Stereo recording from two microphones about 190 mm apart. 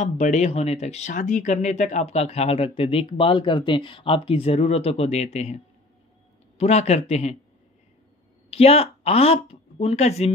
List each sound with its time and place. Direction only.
0.0 s speech: 40° left (ahead or behind)
6.6 s speech: 35° left (ahead or behind)
8.5 s speech: 30° left (ahead or behind)